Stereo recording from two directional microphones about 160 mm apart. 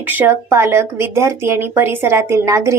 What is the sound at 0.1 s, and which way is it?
A woman's voice, 15° right (ahead or behind).